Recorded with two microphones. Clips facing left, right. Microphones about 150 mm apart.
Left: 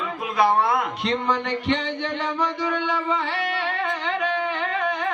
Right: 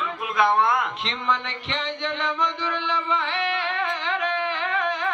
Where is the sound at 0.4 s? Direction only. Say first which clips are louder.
Left 1 dB; 35° left (ahead or behind).